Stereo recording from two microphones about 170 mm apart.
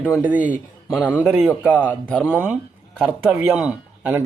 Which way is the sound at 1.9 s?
10° left (ahead or behind).